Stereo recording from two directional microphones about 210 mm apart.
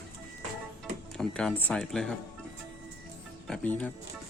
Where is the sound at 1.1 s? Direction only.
5° left (ahead or behind).